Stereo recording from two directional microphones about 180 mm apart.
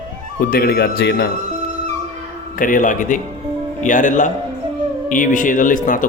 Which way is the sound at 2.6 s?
50° left (ahead or behind).